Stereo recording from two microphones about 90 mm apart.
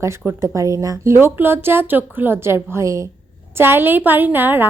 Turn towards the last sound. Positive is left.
turn(degrees=-20)  # may be behind; listen again after turning